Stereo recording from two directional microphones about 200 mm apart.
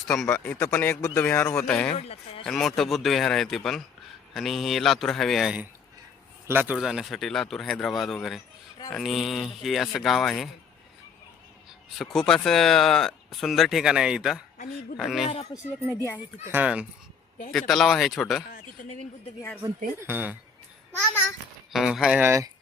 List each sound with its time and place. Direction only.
0.1 s speech: 5° left (ahead or behind)
2.0 s speech: 30° left (ahead or behind)
2.4 s speech: centre (ahead or behind)
11.9 s speech: centre (ahead or behind)
16.0 s speech: 10° left (ahead or behind)
16.5 s speech: 5° right (ahead or behind)
20.0 s speech: 10° right (ahead or behind)
21.7 s speech: centre (ahead or behind)